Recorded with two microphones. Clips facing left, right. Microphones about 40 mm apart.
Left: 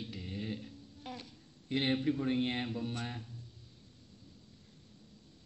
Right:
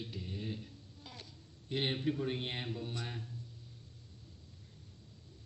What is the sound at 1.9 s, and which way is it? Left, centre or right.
Speech, centre.